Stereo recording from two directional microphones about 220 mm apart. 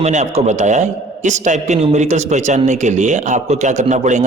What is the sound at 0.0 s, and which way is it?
A man's voice, 30° right (ahead or behind).